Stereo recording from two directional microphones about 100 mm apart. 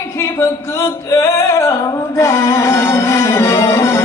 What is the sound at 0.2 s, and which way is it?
Singing, 30° left (ahead or behind).